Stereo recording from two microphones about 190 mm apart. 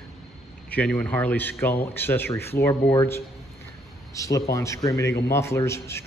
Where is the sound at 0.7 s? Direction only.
5° left (ahead or behind).